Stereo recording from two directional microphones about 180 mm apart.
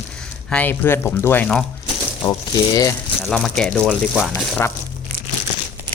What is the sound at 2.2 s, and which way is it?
Speech, 20° left (ahead or behind).